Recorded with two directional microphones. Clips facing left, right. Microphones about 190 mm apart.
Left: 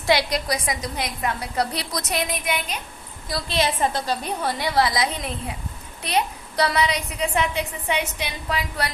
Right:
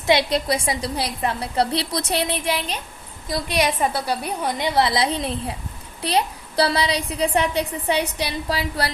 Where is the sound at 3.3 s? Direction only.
20° right (ahead or behind).